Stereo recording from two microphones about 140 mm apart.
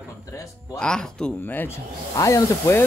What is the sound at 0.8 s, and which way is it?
A man's voice, 5° left (ahead or behind).